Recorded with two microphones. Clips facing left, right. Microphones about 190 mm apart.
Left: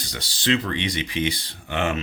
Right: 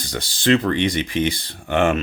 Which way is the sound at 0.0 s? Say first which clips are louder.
Right 5 dB; 50° right (ahead or behind).